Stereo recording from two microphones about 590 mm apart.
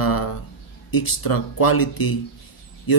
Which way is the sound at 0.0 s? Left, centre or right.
Left.